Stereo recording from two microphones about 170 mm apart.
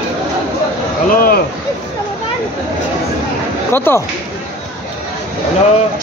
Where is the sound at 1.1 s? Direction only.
60° left (ahead or behind).